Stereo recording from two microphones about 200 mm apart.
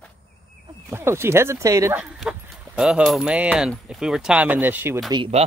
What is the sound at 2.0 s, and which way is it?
Speech, centre (ahead or behind).